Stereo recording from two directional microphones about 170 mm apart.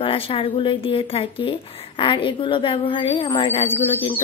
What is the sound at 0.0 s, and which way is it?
A woman's voice, 30° left (ahead or behind).